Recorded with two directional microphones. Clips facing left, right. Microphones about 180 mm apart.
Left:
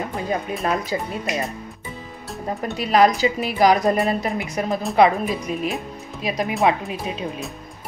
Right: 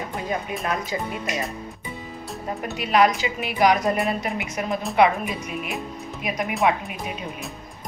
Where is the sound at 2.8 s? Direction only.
35° left (ahead or behind).